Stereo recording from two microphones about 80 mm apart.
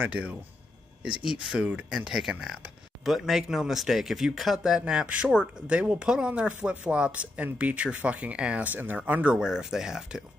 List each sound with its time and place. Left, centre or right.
0.0 s speech: centre